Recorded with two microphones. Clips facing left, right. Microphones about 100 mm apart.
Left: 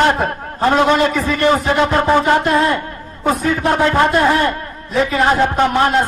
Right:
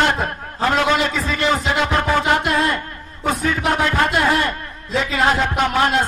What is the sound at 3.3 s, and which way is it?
A man's voice, 25° left (ahead or behind).